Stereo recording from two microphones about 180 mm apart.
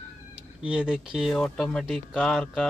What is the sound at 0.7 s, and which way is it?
Speech, 5° right (ahead or behind).